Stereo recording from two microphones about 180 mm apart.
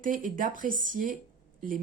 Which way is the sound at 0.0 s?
50° right (ahead or behind).